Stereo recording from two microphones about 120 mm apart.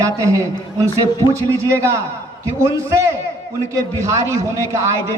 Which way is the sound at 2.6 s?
25° right (ahead or behind).